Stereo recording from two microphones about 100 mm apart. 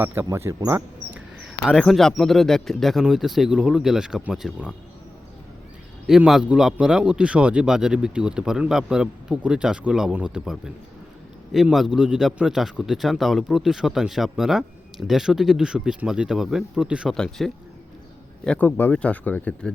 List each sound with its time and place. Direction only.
0.0 s speech: 20° right (ahead or behind)
1.6 s speech: 5° left (ahead or behind)
6.1 s a man's voice: 5° right (ahead or behind)
17.2 s speech: 5° left (ahead or behind)